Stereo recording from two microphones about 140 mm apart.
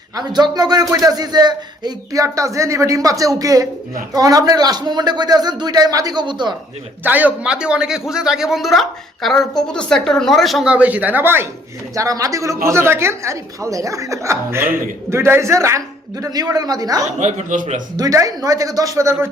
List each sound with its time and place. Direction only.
0.2 s speech: 30° right (ahead or behind)
7.0 s a man's voice: 10° right (ahead or behind)
17.2 s speech: 60° right (ahead or behind)
17.9 s speech: 25° right (ahead or behind)